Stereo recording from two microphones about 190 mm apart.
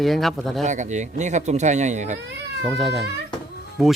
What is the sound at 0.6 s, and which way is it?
Speech, 40° right (ahead or behind).